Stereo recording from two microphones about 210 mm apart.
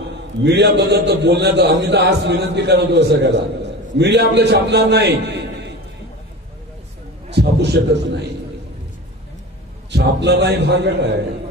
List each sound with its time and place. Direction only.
0.4 s a man's voice: 55° right (ahead or behind)
7.2 s a man's voice: 50° right (ahead or behind)
9.8 s a man's voice: 50° right (ahead or behind)